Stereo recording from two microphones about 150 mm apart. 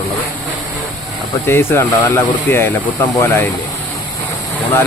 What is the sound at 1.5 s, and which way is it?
Speech, 15° left (ahead or behind).